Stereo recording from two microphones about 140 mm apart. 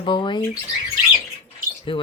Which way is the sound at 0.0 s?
35° left (ahead or behind).